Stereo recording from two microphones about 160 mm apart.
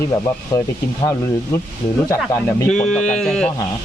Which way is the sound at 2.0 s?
20° left (ahead or behind).